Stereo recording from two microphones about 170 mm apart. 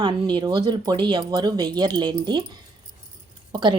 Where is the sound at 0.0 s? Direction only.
25° right (ahead or behind).